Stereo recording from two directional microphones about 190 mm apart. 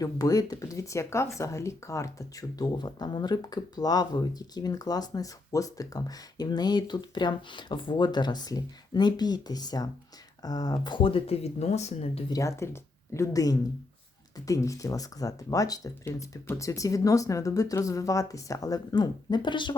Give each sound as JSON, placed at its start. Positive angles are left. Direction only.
{"t": 0.0, "sound": "speech", "side_deg": 20}
{"t": 12.3, "sound": "speech", "side_deg": 15}